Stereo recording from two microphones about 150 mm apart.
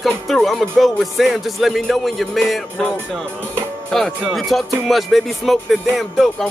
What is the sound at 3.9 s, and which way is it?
Speech, centre (ahead or behind).